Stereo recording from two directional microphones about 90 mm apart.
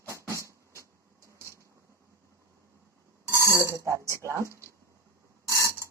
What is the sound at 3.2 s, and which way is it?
Speech, 30° right (ahead or behind).